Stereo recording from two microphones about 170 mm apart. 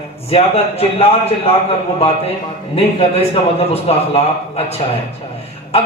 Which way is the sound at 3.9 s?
35° left (ahead or behind).